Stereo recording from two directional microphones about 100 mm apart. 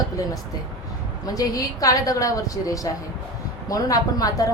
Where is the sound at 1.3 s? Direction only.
35° left (ahead or behind).